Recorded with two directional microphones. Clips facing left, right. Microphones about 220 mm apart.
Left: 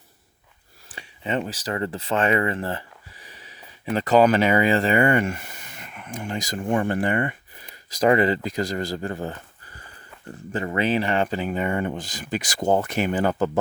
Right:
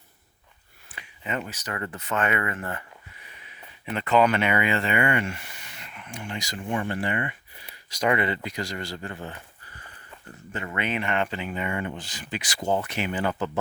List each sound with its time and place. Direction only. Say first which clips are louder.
0.9 s speech: left 5 dB; 30° left (ahead or behind); by 7.7 s 45° left (ahead or behind)
8.0 s speech: left 6 dB; 35° left (ahead or behind)
10.5 s speech: left 7 dB; 35° left (ahead or behind)